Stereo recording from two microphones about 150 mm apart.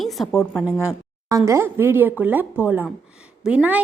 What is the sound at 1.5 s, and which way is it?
A woman's voice, 15° right (ahead or behind).